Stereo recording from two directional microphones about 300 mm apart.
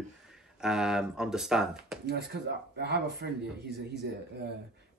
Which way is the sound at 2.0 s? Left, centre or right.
Right.